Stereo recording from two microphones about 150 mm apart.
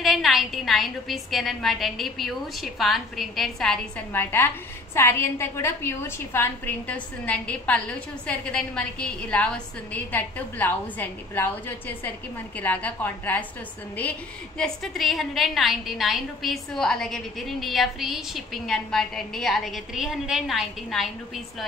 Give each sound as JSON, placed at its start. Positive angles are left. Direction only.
{"t": 0.0, "sound": "a woman's voice", "side_deg": 0}
{"t": 12.5, "sound": "a woman's voice", "side_deg": 10}
{"t": 14.6, "sound": "a woman's voice", "side_deg": 0}